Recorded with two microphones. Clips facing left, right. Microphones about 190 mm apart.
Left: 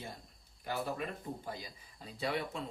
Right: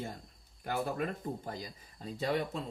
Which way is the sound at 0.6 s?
50° right (ahead or behind).